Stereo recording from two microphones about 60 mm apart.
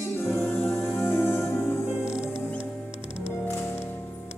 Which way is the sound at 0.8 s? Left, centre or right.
Left.